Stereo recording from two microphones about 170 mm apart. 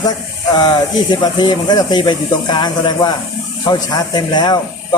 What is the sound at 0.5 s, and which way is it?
Speech, 25° left (ahead or behind).